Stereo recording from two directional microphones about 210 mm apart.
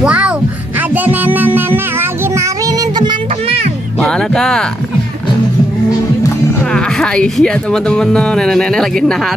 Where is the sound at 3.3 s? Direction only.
30° right (ahead or behind).